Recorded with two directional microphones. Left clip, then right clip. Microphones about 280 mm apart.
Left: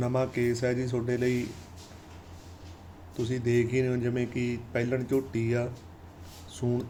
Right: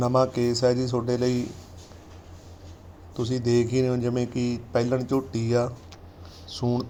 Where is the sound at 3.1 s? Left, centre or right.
Centre.